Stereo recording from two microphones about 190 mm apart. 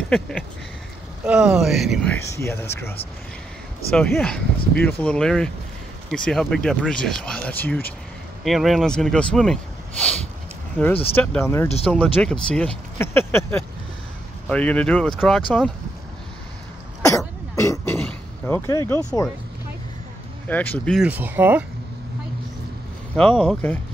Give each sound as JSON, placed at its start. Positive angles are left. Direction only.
{"t": 0.1, "sound": "speech", "side_deg": 5}
{"t": 2.4, "sound": "speech", "side_deg": 15}
{"t": 3.9, "sound": "speech", "side_deg": 5}
{"t": 11.1, "sound": "speech", "side_deg": 10}
{"t": 17.6, "sound": "throat clearing", "side_deg": 15}
{"t": 20.4, "sound": "speech", "side_deg": 10}
{"t": 21.1, "sound": "speech", "side_deg": -10}
{"t": 23.1, "sound": "speech", "side_deg": 5}